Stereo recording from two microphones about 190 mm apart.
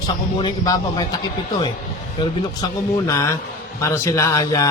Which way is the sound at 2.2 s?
25° left (ahead or behind).